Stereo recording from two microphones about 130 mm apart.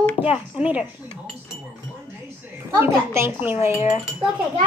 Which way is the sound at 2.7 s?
20° right (ahead or behind).